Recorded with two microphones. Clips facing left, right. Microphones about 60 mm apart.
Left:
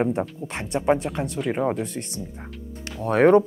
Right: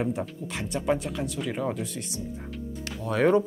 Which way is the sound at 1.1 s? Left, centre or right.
Left.